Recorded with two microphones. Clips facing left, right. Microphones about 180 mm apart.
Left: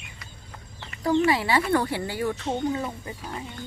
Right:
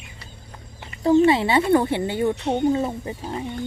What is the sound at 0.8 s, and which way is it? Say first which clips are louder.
Speech: right 6 dB; 25° right (ahead or behind).